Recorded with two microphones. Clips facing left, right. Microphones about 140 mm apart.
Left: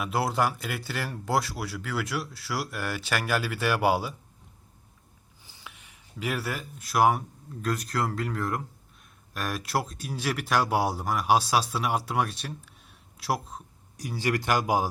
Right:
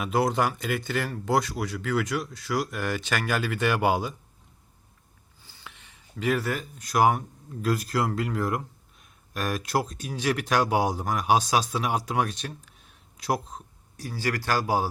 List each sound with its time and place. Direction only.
0.0 s speech: centre (ahead or behind)
5.4 s speech: 15° left (ahead or behind)
14.0 s speech: 20° left (ahead or behind)